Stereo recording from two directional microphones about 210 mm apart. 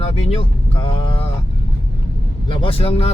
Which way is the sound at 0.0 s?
30° left (ahead or behind).